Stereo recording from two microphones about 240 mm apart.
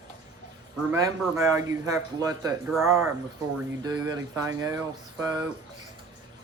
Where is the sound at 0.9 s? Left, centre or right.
Centre.